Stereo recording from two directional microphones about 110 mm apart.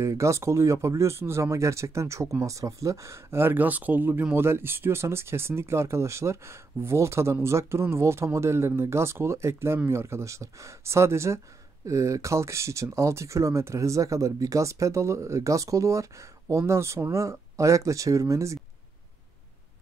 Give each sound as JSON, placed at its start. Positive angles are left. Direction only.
{"t": 0.0, "sound": "speech", "side_deg": -25}